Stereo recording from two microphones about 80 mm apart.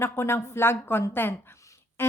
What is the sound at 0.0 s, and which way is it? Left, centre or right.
A woman's voice, left.